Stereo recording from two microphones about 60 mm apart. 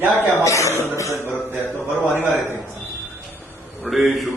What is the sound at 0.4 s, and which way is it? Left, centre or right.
Music, left.